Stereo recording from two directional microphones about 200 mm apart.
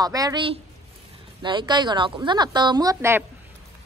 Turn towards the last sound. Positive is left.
turn(degrees=-15)  # may be behind; listen again after turning